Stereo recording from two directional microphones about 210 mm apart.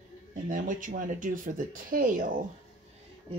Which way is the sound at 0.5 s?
40° right (ahead or behind).